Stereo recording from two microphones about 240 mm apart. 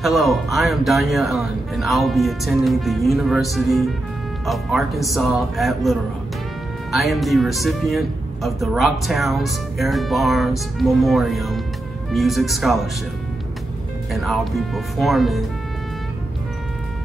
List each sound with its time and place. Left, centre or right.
0.0 s speech: centre
14.1 s speech: centre